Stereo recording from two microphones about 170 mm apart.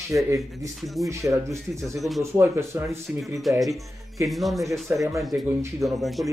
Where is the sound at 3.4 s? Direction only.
Centre (ahead or behind).